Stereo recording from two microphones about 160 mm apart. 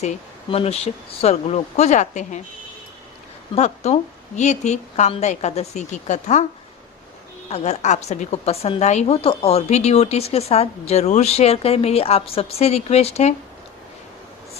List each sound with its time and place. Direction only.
0.5 s a woman's voice: 40° left (ahead or behind)
3.5 s a woman's voice: 40° left (ahead or behind)
7.5 s a woman's voice: 45° left (ahead or behind)